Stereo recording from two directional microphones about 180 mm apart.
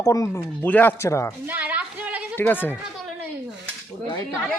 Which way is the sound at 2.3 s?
10° left (ahead or behind).